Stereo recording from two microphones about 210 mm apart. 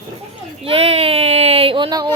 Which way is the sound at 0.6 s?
30° right (ahead or behind).